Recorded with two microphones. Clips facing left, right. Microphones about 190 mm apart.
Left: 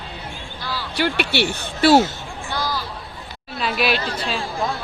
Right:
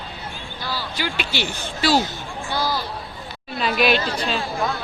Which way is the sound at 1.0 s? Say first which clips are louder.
Left 7 dB; 65° left (ahead or behind).